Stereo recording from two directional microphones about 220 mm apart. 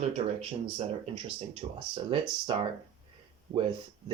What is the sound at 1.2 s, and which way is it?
Speech, 20° right (ahead or behind).